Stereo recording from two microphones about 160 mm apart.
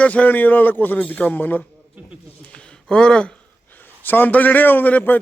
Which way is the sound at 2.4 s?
5° left (ahead or behind).